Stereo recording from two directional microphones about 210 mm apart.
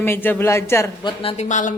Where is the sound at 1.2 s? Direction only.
30° left (ahead or behind).